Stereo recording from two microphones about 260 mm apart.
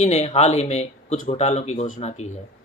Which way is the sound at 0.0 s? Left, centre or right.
Left.